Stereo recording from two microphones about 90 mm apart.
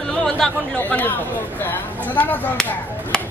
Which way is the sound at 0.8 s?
20° left (ahead or behind).